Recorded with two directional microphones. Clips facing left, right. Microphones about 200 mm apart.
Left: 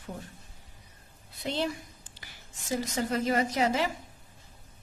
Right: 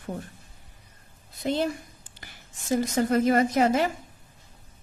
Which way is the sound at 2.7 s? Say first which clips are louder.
Right 7 dB; 50° right (ahead or behind).